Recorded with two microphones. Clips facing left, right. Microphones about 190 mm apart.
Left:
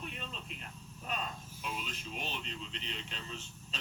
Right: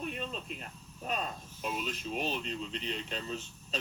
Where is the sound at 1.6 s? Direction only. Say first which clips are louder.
Right 6 dB; 45° right (ahead or behind).